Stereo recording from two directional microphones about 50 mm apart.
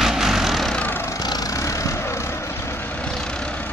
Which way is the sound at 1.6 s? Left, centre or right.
Left.